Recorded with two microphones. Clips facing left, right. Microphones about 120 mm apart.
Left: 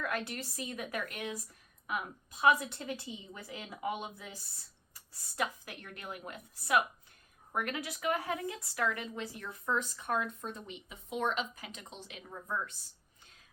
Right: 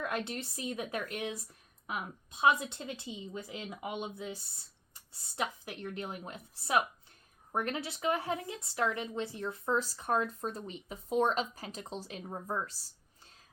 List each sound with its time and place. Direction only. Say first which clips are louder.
0.0 s a woman's voice: right 1 dB; 25° right (ahead or behind)
2.4 s a woman's voice: even; 25° right (ahead or behind)
5.4 s a woman's voice: even; 25° right (ahead or behind)